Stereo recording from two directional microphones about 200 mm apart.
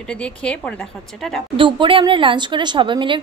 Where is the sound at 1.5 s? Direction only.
25° right (ahead or behind).